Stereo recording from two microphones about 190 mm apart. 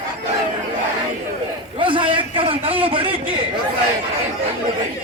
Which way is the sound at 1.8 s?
25° right (ahead or behind).